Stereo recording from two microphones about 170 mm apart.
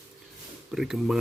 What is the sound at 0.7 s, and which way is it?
Speech, centre (ahead or behind).